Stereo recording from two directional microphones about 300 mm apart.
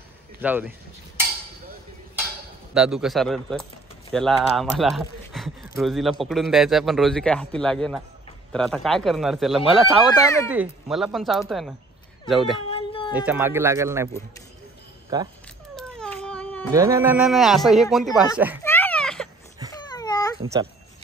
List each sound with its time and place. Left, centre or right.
0.4 s speech: centre
2.7 s speech: centre
10.2 s speech: centre
10.5 s speech: centre
12.6 s cat: centre
13.1 s speech: centre
15.1 s speech: centre
15.7 s cat: centre
16.7 s speech: centre
18.6 s a sound: centre
19.7 s babbling: centre
20.3 s a child's voice: centre